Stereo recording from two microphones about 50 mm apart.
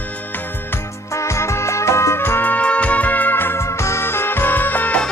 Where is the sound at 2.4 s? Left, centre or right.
Left.